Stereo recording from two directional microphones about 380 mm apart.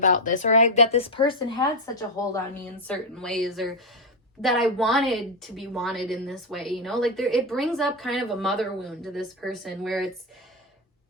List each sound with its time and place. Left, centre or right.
0.0 s a woman's voice: centre